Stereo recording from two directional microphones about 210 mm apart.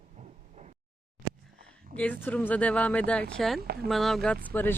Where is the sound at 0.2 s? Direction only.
30° right (ahead or behind).